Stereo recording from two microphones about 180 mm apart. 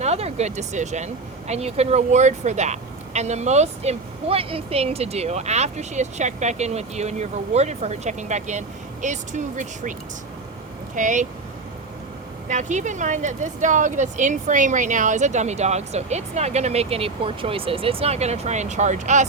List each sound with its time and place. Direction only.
0.0 s speech: 35° right (ahead or behind)
10.9 s speech: 45° right (ahead or behind)
12.5 s speech: 45° right (ahead or behind)